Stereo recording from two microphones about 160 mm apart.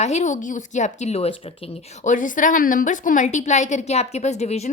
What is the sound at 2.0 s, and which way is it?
A woman's voice, 55° left (ahead or behind).